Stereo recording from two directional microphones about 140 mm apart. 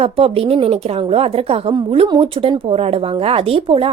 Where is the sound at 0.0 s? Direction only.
45° right (ahead or behind).